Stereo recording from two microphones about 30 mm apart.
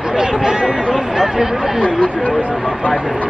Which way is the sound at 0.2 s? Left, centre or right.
Right.